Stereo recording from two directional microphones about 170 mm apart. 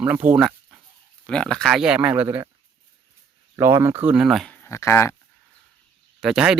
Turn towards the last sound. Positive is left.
turn(degrees=-5)  # may be behind; listen again after turning